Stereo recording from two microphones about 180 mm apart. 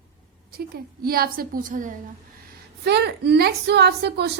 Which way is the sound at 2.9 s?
65° right (ahead or behind).